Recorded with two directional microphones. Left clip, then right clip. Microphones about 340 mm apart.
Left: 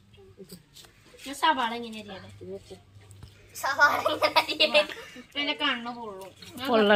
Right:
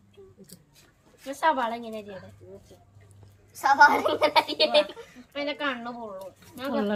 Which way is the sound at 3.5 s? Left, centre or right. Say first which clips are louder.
Right 5 dB; right.